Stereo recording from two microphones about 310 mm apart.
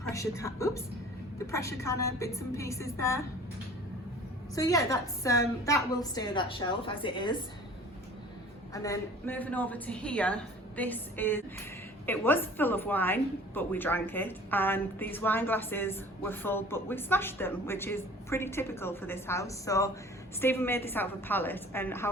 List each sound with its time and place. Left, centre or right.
0.1 s a woman's voice: centre
4.5 s a woman's voice: centre
8.7 s a woman's voice: centre